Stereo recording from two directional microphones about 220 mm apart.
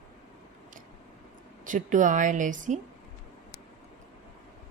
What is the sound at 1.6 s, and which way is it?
A woman's voice, 35° right (ahead or behind).